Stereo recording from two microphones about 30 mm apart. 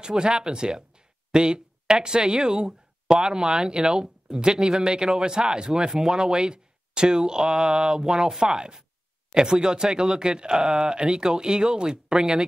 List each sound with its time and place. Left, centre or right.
0.0 s speech: right
3.5 s a man's voice: right
4.6 s speech: centre
4.8 s a man's voice: right
6.3 s a sound: right
7.2 s speech: right
8.5 s a man's voice: right
10.6 s speech: centre
11.1 s a man's voice: right
12.2 s speech: centre